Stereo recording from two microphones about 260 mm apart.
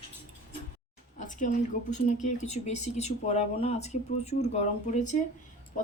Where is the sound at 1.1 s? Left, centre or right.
Left.